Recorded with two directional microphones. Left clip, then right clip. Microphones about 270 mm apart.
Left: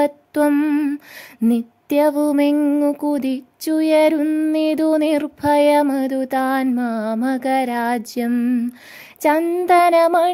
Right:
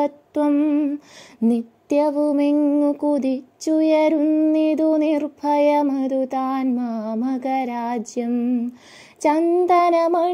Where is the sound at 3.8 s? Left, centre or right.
Centre.